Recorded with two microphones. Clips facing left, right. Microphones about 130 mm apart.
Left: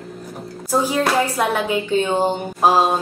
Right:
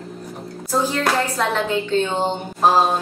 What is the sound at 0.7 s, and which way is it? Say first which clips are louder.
Speech: left 2 dB; 10° left (ahead or behind).